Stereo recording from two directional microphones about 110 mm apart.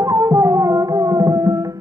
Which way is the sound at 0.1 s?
25° right (ahead or behind).